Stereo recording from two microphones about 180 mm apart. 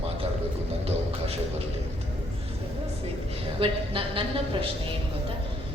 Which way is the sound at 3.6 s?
30° right (ahead or behind).